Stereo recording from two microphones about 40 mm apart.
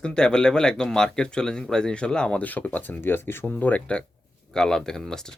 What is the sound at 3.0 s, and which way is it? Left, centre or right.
Speech, left.